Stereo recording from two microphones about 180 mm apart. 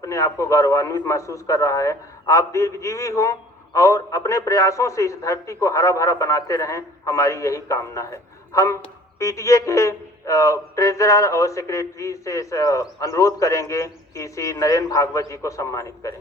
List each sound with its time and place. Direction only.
0.0 s a man's voice: 15° left (ahead or behind)